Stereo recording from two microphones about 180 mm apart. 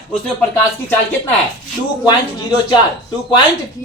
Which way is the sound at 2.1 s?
25° left (ahead or behind).